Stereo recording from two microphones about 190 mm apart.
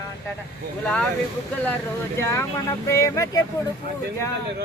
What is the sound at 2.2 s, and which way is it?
Speech, 15° left (ahead or behind).